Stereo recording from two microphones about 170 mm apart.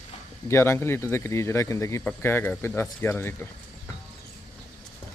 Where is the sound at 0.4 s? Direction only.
15° left (ahead or behind).